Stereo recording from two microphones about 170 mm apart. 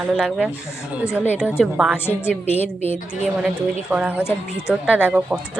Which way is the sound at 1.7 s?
10° right (ahead or behind).